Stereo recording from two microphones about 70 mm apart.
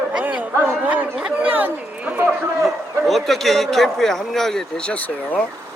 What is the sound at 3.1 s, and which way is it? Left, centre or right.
Speech, centre.